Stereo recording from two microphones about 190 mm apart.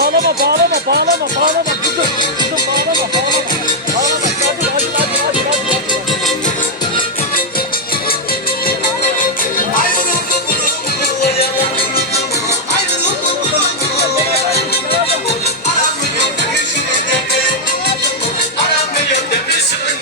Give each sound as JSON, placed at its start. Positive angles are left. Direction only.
{"t": 0.0, "sound": "music", "side_deg": -55}
{"t": 9.7, "sound": "music", "side_deg": 45}